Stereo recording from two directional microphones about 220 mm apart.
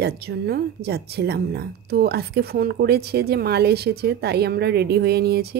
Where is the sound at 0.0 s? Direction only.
45° right (ahead or behind).